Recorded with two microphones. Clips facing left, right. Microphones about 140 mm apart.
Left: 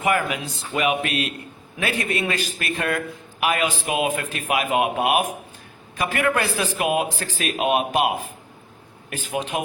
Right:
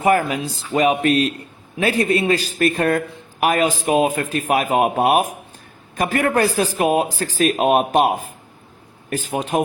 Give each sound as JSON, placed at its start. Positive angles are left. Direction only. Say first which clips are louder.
{"t": 0.0, "sound": "speech", "louder": "right 5 dB", "side_deg": -35}